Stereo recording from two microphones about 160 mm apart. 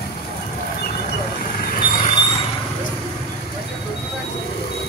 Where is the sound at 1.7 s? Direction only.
60° left (ahead or behind).